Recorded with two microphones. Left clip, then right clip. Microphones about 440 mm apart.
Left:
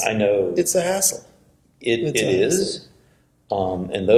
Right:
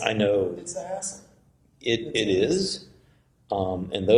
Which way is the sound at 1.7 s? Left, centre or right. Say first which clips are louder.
Left 5 dB; right.